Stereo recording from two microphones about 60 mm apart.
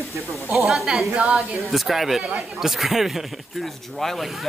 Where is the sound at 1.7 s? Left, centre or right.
Centre.